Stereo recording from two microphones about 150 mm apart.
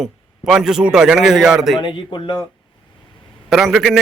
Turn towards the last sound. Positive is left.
turn(degrees=0)  # may be behind; listen again after turning